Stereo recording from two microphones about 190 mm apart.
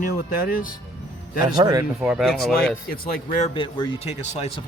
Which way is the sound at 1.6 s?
20° right (ahead or behind).